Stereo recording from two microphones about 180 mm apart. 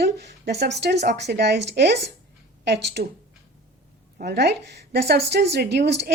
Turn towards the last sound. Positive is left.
turn(degrees=-70)  # may be behind; listen again after turning